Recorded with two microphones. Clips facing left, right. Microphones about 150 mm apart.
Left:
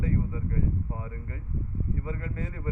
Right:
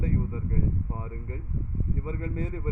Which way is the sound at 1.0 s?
25° right (ahead or behind).